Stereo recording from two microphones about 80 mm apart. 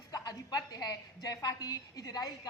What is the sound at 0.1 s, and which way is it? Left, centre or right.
A woman's voice, left.